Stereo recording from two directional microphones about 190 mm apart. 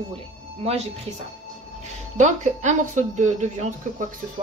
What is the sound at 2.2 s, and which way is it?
A woman's voice, 40° right (ahead or behind).